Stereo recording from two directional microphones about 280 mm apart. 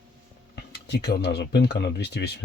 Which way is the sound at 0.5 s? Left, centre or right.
Left.